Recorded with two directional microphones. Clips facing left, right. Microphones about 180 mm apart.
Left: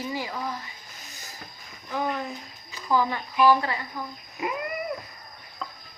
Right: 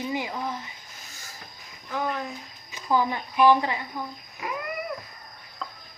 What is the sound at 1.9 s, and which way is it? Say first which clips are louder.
Speech: left 1 dB; centre (ahead or behind).